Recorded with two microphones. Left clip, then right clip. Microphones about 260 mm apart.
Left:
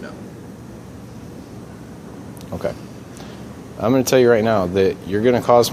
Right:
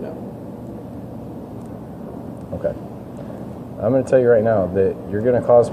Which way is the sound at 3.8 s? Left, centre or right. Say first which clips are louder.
Even; left.